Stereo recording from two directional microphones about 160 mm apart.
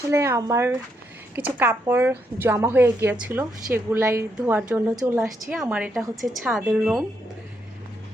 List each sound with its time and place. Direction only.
0.1 s a woman's voice: 15° right (ahead or behind)